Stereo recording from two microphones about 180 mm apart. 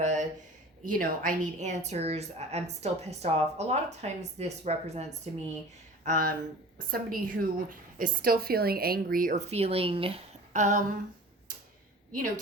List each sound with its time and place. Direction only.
0.0 s a sound: 40° right (ahead or behind)
0.9 s a woman's voice: 50° right (ahead or behind)
6.1 s a woman's voice: 50° right (ahead or behind)
9.5 s a woman's voice: 35° right (ahead or behind)